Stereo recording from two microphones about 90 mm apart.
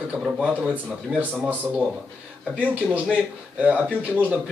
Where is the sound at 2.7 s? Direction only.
15° right (ahead or behind).